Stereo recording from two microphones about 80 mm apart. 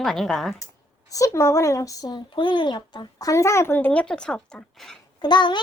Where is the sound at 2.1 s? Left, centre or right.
Left.